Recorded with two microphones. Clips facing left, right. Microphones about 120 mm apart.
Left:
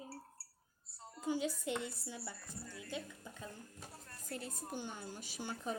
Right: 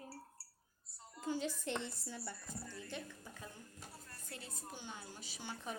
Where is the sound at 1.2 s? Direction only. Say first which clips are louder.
Left 2 dB; 15° left (ahead or behind).